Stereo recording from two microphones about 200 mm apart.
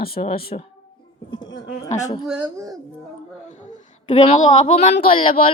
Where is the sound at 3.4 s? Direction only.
35° left (ahead or behind).